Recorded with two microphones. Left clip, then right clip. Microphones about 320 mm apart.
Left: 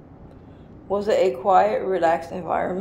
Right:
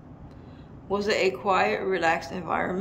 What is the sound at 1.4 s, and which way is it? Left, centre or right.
Speech, right.